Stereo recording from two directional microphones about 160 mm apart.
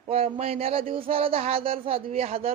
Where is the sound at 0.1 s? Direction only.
35° right (ahead or behind).